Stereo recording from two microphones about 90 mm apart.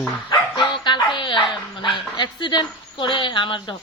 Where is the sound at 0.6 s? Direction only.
60° left (ahead or behind).